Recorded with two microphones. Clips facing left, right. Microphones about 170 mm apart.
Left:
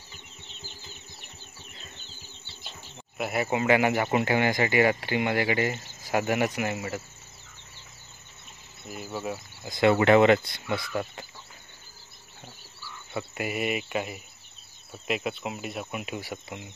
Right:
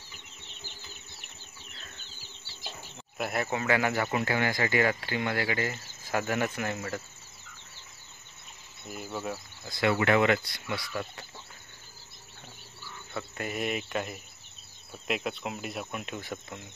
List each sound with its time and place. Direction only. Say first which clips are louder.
3.2 s speech: left 3 dB; 5° left (ahead or behind)
3.4 s speech: left 6 dB; 20° left (ahead or behind)
8.8 s speech: left 2 dB; 5° left (ahead or behind)
9.8 s speech: left 6 dB; 25° left (ahead or behind)
13.1 s speech: left 4 dB; 5° left (ahead or behind)